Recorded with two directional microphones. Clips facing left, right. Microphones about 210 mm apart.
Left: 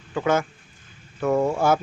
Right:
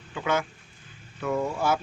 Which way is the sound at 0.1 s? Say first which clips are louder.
Left 5 dB; 45° left (ahead or behind).